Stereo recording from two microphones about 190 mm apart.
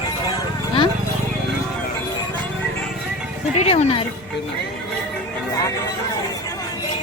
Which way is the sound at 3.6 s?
30° left (ahead or behind).